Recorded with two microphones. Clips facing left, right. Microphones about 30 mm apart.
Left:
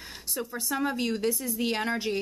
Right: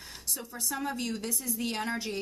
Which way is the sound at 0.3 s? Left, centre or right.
Left.